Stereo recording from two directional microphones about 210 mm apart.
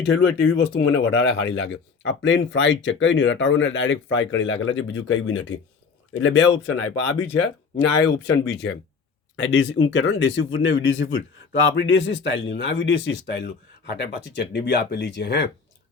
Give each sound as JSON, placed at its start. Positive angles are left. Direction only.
{"t": 0.0, "sound": "speech", "side_deg": 55}
{"t": 8.0, "sound": "speech", "side_deg": 55}